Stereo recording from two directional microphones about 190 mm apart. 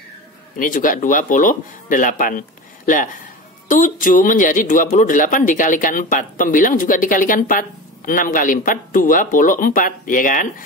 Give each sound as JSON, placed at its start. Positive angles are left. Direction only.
{"t": 0.6, "sound": "speech", "side_deg": 45}